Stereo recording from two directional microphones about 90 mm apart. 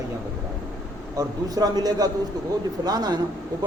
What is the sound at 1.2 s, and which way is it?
Speech, 45° right (ahead or behind).